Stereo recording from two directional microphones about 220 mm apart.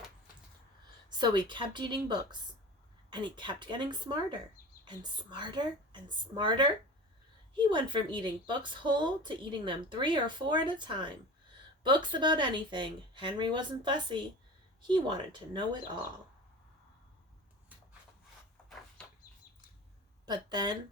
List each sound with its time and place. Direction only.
1.2 s speech: 20° right (ahead or behind)
20.2 s speech: 20° right (ahead or behind)